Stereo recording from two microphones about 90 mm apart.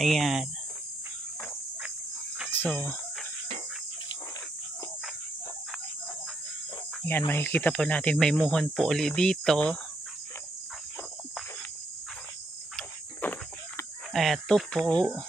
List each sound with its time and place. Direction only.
0.0 s speech: centre (ahead or behind)
2.5 s speech: 20° left (ahead or behind)
7.1 s speech: 25° left (ahead or behind); by 9.8 s 10° left (ahead or behind)
13.2 s a sound: 20° left (ahead or behind)
14.1 s speech: centre (ahead or behind)